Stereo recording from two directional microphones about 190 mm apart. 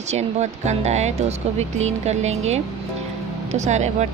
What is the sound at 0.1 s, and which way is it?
Speech, 35° right (ahead or behind).